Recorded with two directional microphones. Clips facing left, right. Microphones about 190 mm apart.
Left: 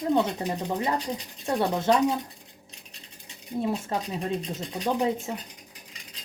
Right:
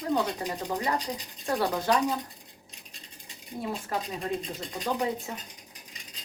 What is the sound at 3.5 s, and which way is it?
Speech, 25° left (ahead or behind).